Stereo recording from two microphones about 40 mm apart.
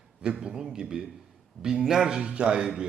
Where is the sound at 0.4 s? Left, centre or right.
Centre.